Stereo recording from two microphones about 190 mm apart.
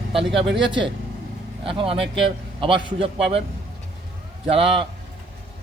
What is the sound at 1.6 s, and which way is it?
A man's voice, 30° right (ahead or behind).